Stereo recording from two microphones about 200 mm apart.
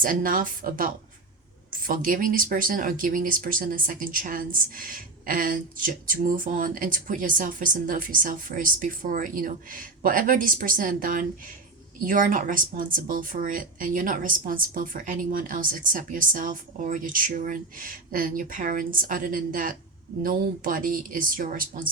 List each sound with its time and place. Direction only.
0.0 s speech: 45° right (ahead or behind)